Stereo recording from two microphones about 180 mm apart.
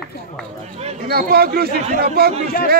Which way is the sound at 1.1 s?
60° right (ahead or behind).